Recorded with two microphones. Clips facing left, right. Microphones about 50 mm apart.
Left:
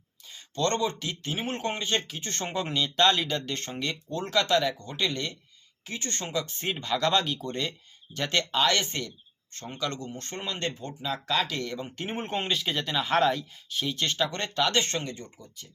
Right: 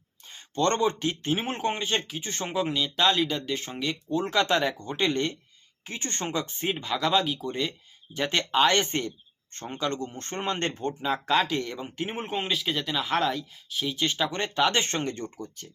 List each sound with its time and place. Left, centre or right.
0.3 s speech: right; by 2.4 s centre
2.4 s speech: centre
4.2 s speech: right
6.6 s speech: centre
8.1 s speech: centre; by 10.9 s right
11.0 s speech: right
11.9 s speech: centre; by 15.1 s right
15.1 s speech: right